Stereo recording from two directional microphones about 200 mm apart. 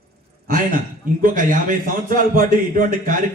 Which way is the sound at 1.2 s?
40° right (ahead or behind).